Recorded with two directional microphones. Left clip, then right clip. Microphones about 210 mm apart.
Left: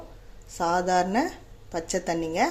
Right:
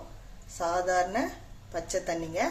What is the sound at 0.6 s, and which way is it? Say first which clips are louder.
A woman's voice: left 4 dB; 45° left (ahead or behind).